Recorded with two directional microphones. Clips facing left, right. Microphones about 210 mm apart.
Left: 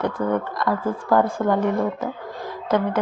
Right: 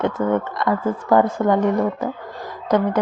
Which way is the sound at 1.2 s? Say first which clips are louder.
Right 3 dB; 5° left (ahead or behind).